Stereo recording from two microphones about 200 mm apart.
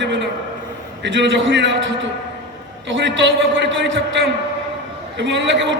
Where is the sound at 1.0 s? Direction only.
65° right (ahead or behind).